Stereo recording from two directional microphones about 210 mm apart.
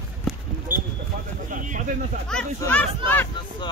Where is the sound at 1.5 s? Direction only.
40° right (ahead or behind).